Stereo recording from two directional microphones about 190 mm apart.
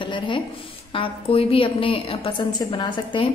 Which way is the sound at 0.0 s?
25° left (ahead or behind).